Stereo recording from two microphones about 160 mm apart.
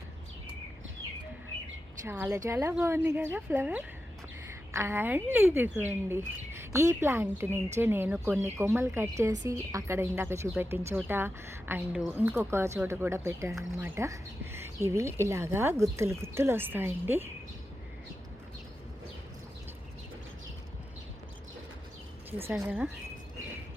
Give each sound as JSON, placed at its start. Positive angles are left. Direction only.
{"t": 2.0, "sound": "a woman's voice", "side_deg": -15}
{"t": 22.3, "sound": "a woman's voice", "side_deg": -15}